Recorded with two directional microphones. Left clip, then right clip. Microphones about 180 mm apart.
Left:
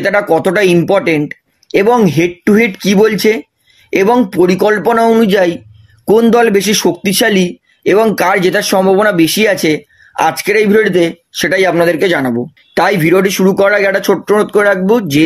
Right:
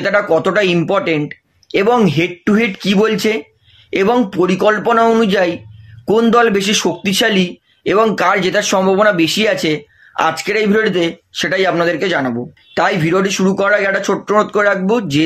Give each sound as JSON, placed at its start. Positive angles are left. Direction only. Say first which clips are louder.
{"t": 0.0, "sound": "a man's voice", "louder": "left 2 dB", "side_deg": 45}